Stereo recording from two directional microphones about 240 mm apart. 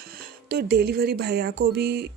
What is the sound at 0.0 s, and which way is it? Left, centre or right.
Speech, right.